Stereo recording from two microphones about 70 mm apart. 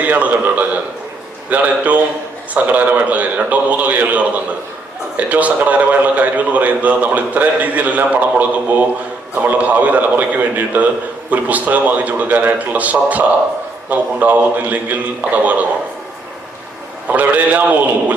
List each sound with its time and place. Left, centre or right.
0.0 s a man's voice: right
17.1 s a man's voice: right